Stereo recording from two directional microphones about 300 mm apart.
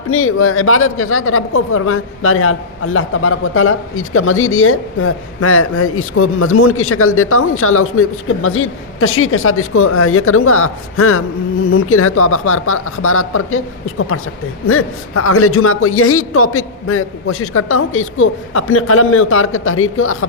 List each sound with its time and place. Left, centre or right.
0.1 s speech: left
14.7 s speech: left